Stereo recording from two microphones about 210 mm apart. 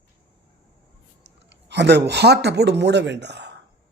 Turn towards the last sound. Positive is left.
turn(degrees=-55)  # may be behind; listen again after turning